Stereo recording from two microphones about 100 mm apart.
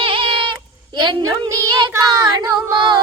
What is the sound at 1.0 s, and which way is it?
A woman's voice, 45° right (ahead or behind).